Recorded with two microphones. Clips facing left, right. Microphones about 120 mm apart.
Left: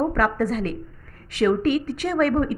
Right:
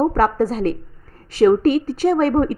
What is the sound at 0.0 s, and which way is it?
A woman's voice, 35° right (ahead or behind).